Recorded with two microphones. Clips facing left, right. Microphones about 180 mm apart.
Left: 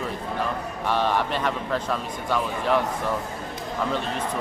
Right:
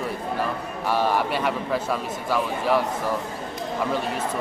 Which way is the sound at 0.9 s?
10° right (ahead or behind).